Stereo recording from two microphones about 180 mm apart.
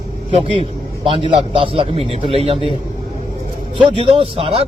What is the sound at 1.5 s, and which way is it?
A man's voice, 30° right (ahead or behind).